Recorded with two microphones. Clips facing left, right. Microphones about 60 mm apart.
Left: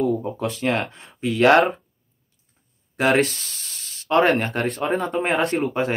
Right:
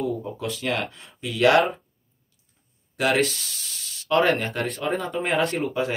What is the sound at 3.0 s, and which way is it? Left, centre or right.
Speech, left.